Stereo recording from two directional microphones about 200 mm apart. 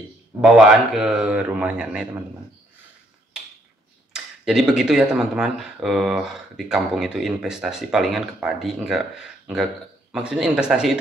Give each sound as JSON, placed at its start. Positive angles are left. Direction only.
{"t": 0.4, "sound": "speech", "side_deg": -5}
{"t": 4.1, "sound": "speech", "side_deg": -5}